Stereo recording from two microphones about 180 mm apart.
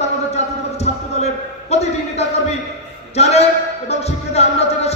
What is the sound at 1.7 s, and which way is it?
Speech, 35° left (ahead or behind).